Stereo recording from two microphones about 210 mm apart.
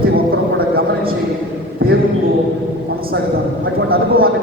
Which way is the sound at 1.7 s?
45° right (ahead or behind).